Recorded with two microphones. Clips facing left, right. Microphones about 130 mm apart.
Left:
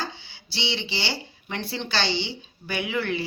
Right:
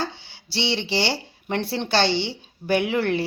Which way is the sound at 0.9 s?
70° right (ahead or behind).